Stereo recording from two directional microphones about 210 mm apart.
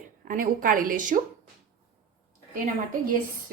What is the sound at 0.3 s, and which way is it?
Speech, 40° right (ahead or behind).